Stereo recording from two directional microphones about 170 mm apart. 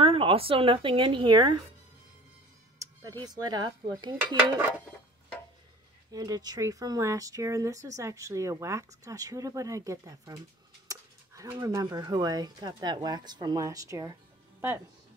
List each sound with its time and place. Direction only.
0.0 s speech: 35° right (ahead or behind)
2.8 s speech: 20° right (ahead or behind)
4.6 s dishes: 10° right (ahead or behind)
6.1 s speech: 20° right (ahead or behind)